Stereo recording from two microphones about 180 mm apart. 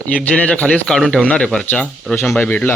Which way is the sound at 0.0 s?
5° left (ahead or behind).